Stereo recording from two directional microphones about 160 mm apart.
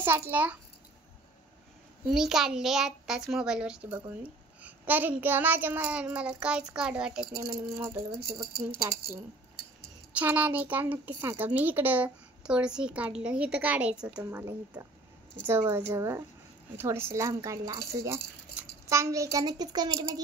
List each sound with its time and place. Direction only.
0.0 s a child's voice: 10° right (ahead or behind)
2.0 s a child's voice: 5° right (ahead or behind)
7.3 s speech: 20° right (ahead or behind)
8.1 s speech: 30° right (ahead or behind)
8.8 s a child's voice: 15° right (ahead or behind)
10.1 s a child's voice: 10° right (ahead or behind)